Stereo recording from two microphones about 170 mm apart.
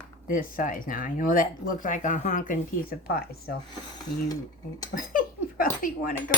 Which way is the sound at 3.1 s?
65° left (ahead or behind).